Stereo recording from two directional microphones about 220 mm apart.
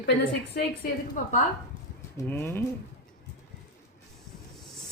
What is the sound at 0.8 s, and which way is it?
Speech, 45° left (ahead or behind).